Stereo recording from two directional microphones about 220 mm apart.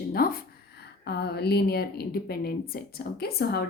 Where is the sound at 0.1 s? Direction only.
45° left (ahead or behind).